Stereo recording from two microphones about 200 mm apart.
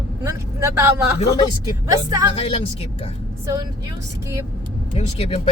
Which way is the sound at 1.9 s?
15° right (ahead or behind).